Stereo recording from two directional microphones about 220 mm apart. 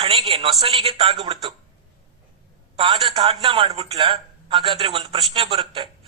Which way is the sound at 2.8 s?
20° right (ahead or behind).